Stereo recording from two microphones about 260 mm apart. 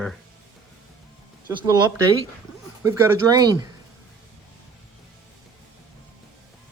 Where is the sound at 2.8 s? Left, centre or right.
Centre.